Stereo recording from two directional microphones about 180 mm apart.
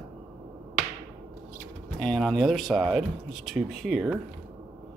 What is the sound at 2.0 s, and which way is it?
Speech, 5° left (ahead or behind).